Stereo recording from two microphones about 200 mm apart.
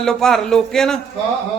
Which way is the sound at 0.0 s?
5° left (ahead or behind).